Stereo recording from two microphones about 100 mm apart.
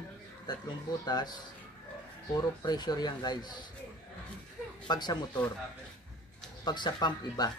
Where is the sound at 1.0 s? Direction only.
45° left (ahead or behind).